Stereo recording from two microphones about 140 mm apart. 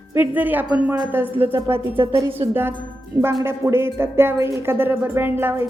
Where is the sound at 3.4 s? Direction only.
15° right (ahead or behind).